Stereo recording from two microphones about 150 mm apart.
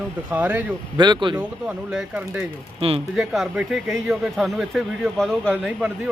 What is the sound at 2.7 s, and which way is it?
Speech, 40° right (ahead or behind).